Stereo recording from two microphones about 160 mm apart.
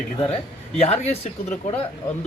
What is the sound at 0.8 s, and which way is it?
Speech, 40° left (ahead or behind).